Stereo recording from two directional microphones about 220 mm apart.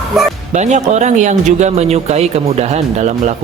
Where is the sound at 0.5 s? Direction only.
30° right (ahead or behind).